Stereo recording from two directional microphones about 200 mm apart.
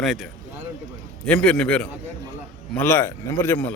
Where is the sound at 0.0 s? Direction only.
Centre (ahead or behind).